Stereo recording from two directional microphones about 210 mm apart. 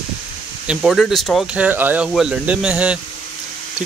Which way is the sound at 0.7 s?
Centre (ahead or behind).